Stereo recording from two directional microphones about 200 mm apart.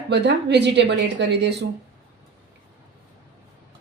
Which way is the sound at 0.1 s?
55° right (ahead or behind).